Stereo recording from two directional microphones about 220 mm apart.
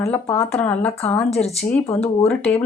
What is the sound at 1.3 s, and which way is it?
Speech, 30° left (ahead or behind).